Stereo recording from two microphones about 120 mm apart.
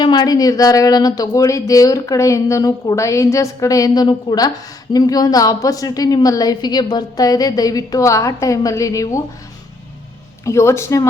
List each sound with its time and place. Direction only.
0.0 s speech: 35° left (ahead or behind)
10.4 s speech: 25° left (ahead or behind)